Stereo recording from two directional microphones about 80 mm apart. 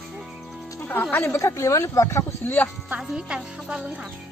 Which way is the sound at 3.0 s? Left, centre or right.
Centre.